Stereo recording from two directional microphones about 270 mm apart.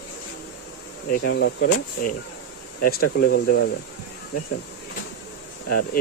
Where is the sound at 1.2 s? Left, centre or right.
Left.